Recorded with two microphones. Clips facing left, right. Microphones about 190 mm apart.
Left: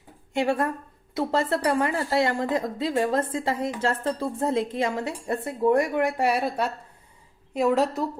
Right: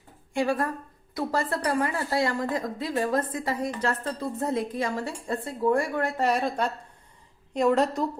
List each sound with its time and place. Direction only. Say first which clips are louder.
0.3 s a woman's voice: left 2 dB; 25° left (ahead or behind); by 8.0 s 5° left (ahead or behind)